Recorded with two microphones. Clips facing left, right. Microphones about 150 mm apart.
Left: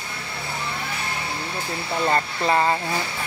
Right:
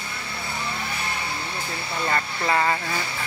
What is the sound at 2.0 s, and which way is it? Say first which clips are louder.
Speech: left 3 dB; 25° left (ahead or behind).